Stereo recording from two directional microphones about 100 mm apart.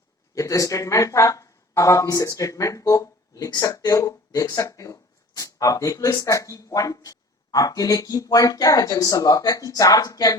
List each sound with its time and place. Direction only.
0.3 s speech: 30° left (ahead or behind)